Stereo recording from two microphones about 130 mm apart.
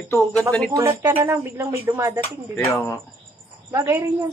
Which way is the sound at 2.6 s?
20° left (ahead or behind).